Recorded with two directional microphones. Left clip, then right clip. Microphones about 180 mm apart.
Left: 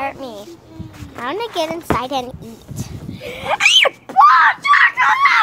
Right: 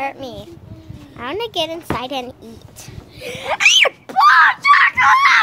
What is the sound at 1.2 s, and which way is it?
Speech, 5° right (ahead or behind).